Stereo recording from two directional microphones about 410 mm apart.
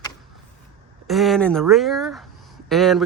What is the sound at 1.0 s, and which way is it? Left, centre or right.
Speech, centre.